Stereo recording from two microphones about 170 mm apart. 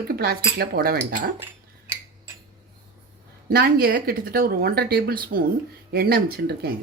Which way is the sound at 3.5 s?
65° right (ahead or behind).